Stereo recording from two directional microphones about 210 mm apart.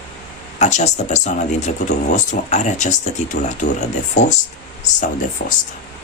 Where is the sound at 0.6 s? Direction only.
35° left (ahead or behind).